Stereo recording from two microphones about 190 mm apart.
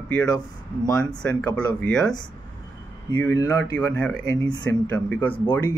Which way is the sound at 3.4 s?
20° left (ahead or behind).